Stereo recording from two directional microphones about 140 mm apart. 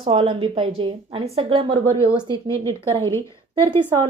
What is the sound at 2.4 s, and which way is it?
Speech, 20° left (ahead or behind).